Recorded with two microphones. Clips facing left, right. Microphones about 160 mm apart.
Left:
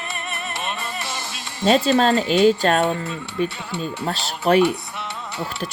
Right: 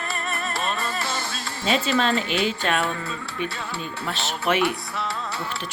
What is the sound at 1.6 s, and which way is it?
Speech, 40° left (ahead or behind).